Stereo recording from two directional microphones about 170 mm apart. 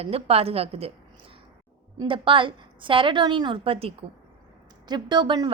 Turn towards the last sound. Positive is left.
turn(degrees=-25)  # may be behind; listen again after turning